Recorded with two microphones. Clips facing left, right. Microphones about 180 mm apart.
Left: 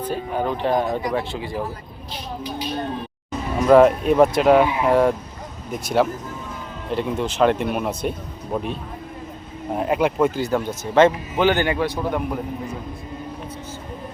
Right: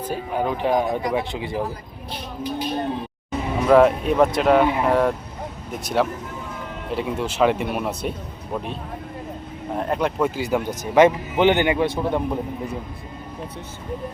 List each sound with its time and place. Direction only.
0.0 s speech: 10° right (ahead or behind)
2.4 s speech: 50° right (ahead or behind)
3.6 s speech: centre (ahead or behind)
9.7 s speech: 5° left (ahead or behind)
10.3 s speech: 10° right (ahead or behind)